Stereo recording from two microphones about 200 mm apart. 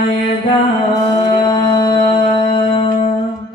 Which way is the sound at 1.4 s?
25° left (ahead or behind).